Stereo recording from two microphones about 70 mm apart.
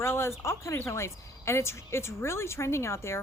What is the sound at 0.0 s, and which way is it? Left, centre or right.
A woman's voice, left.